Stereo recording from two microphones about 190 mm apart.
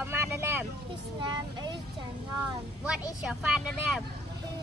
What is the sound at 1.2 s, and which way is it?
Speech, 25° right (ahead or behind).